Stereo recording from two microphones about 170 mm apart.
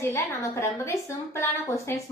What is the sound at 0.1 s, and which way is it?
A woman's voice, 15° left (ahead or behind).